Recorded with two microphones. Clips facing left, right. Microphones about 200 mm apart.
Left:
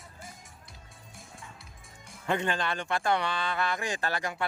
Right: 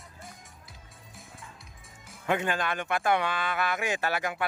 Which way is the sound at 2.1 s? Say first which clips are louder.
Right 1 dB; 5° right (ahead or behind).